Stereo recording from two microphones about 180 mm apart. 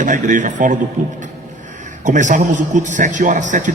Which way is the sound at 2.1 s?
45° right (ahead or behind).